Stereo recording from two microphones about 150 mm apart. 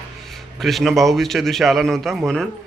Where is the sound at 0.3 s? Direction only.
Centre (ahead or behind).